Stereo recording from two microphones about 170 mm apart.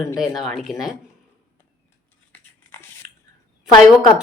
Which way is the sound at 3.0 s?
50° right (ahead or behind).